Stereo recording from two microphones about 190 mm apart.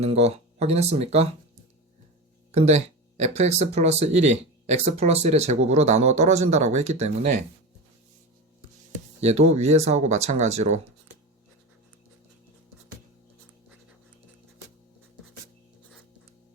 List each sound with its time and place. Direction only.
0.0 s speech: 35° right (ahead or behind)
2.5 s speech: 35° right (ahead or behind)
9.2 s speech: 35° right (ahead or behind)